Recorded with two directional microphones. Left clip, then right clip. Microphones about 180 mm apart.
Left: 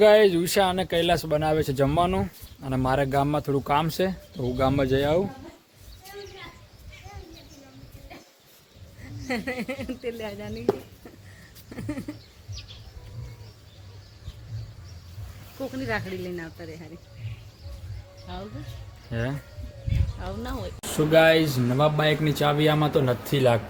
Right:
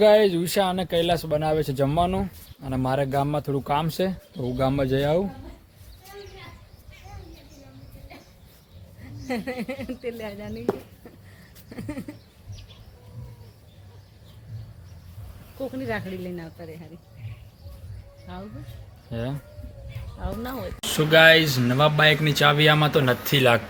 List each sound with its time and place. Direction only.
0.0 s speech: centre (ahead or behind)
9.2 s speech: 5° right (ahead or behind)
11.7 s a sound: centre (ahead or behind)
15.7 s speech: 10° right (ahead or behind)
19.1 s speech: 10° left (ahead or behind)
20.1 s speech: 15° right (ahead or behind)
20.8 s speech: 5° left (ahead or behind)